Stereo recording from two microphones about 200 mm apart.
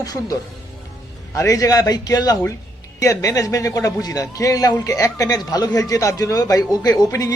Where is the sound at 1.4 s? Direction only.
15° left (ahead or behind).